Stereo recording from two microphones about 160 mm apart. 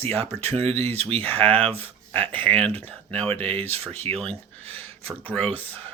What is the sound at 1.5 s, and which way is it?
Speech, 10° left (ahead or behind).